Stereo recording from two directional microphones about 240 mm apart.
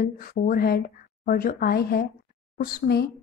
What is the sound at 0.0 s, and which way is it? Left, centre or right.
Speech, left.